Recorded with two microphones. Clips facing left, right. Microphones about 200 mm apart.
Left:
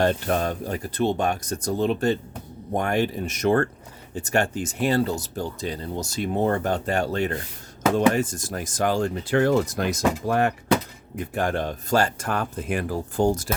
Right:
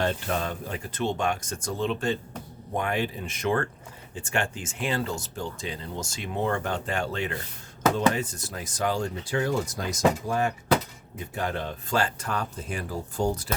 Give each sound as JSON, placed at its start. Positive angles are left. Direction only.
{"t": 0.0, "sound": "speech", "side_deg": 45}
{"t": 11.3, "sound": "speech", "side_deg": 50}